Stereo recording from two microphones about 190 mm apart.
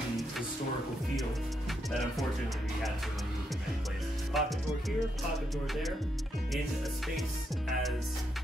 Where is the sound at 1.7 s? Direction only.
Centre (ahead or behind).